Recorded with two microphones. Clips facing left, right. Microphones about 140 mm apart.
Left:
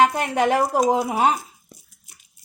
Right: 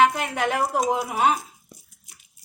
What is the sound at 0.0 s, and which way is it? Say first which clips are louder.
A woman's voice: left 2 dB; 40° left (ahead or behind).